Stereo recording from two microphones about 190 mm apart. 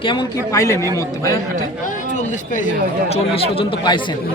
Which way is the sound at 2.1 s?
40° left (ahead or behind).